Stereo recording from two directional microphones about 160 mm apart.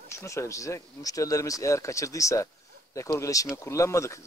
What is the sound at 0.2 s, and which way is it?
Speech, 20° left (ahead or behind).